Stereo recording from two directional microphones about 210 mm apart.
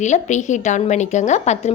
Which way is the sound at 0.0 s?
35° left (ahead or behind).